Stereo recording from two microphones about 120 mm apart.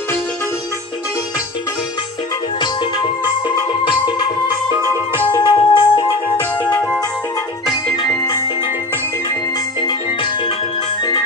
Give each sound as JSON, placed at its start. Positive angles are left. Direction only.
{"t": 2.6, "sound": "music", "side_deg": 40}
{"t": 4.8, "sound": "music", "side_deg": 20}
{"t": 5.3, "sound": "music", "side_deg": 40}
{"t": 7.7, "sound": "music", "side_deg": 35}
{"t": 9.8, "sound": "music", "side_deg": 40}